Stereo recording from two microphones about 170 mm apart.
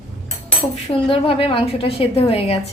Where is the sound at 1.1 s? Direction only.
35° left (ahead or behind).